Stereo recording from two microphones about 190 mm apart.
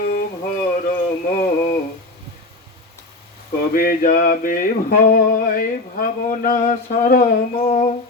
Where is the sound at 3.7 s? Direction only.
50° left (ahead or behind).